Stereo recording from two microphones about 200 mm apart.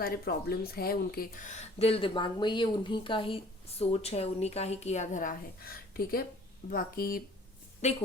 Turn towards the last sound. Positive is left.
turn(degrees=35)  # may be behind; listen again after turning